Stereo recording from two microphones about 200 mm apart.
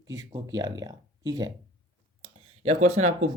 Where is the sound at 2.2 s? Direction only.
30° right (ahead or behind).